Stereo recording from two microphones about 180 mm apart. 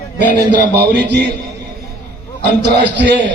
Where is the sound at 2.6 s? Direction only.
75° right (ahead or behind).